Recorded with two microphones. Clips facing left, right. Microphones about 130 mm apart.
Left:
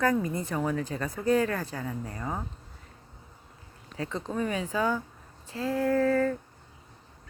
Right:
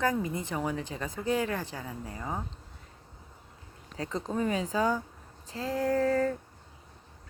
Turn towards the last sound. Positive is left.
turn(degrees=-30)  # may be behind; listen again after turning